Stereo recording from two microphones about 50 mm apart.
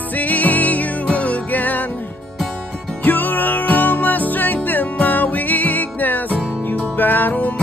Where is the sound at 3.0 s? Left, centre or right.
Left.